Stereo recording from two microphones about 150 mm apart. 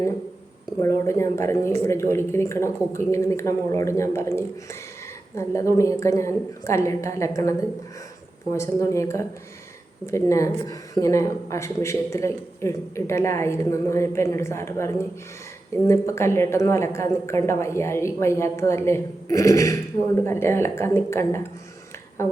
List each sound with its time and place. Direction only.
0.8 s speech: 20° left (ahead or behind)
8.5 s a woman's voice: 20° left (ahead or behind)